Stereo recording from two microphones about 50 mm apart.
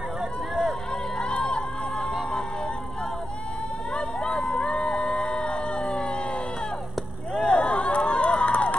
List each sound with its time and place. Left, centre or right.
1.3 s a sound: centre
3.9 s music: centre
7.3 s crowd: left